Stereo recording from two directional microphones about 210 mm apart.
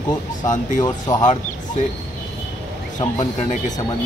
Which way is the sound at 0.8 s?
20° left (ahead or behind).